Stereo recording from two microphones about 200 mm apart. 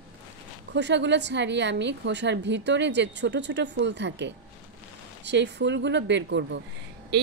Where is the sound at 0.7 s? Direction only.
60° right (ahead or behind).